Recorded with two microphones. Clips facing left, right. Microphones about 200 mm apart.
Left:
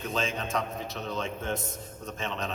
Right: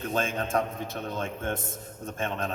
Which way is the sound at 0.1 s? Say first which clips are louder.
Right 3 dB; 55° right (ahead or behind).